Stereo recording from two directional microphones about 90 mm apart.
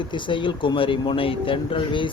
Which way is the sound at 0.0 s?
60° left (ahead or behind).